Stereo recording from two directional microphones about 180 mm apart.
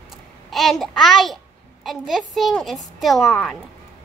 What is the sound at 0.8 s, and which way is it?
A woman's voice, centre (ahead or behind).